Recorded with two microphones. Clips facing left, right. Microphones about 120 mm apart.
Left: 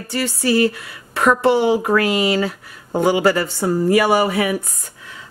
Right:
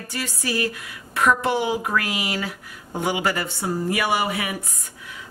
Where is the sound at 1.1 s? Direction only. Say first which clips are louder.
Left 5 dB; 35° left (ahead or behind).